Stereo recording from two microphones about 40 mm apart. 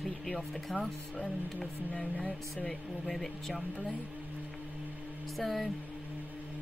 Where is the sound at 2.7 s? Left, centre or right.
Centre.